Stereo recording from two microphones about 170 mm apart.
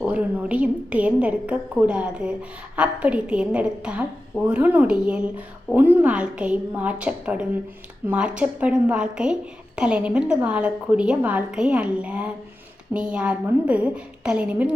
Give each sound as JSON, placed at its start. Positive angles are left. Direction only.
{"t": 0.0, "sound": "a woman's voice", "side_deg": -10}